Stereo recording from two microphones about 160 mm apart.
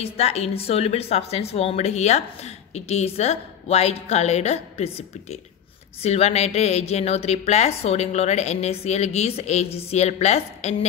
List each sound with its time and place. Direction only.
0.0 s a woman's voice: 40° left (ahead or behind)